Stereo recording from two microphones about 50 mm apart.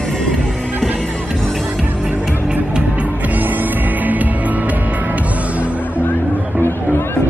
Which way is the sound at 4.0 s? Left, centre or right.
Right.